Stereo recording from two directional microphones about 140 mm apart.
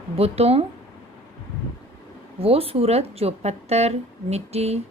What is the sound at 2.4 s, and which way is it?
Speech, 45° right (ahead or behind).